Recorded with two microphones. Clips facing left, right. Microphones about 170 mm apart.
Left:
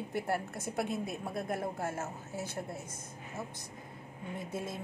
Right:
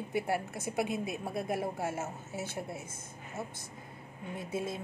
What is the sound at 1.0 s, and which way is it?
Speech, 20° right (ahead or behind).